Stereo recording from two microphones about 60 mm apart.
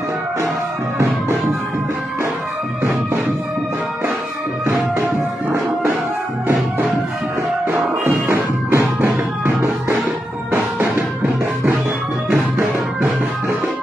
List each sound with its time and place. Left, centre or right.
7.7 s music: right